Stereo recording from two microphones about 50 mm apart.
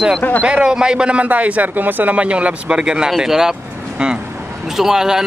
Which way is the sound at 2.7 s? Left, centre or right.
Centre.